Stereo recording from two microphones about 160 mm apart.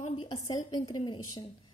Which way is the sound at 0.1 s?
30° left (ahead or behind).